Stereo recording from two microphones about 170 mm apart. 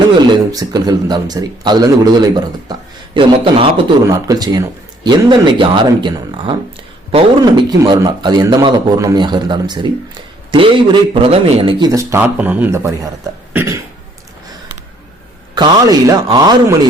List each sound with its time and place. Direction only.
0.5 s speech: 20° right (ahead or behind)
3.2 s speech: 30° right (ahead or behind)
11.8 s a man's voice: 20° right (ahead or behind)
13.5 s cough: 10° right (ahead or behind)
15.5 s speech: 25° right (ahead or behind)